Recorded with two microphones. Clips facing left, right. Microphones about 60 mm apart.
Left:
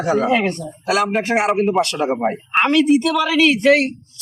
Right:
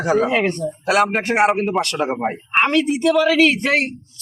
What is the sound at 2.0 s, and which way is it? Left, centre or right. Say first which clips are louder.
Speech: left 2 dB; centre.